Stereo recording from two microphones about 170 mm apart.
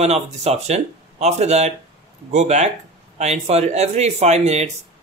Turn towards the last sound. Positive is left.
turn(degrees=-40)  # may be behind; listen again after turning